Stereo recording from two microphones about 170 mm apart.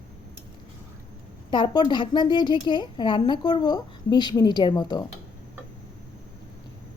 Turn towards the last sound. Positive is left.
turn(degrees=25)  # may be behind; listen again after turning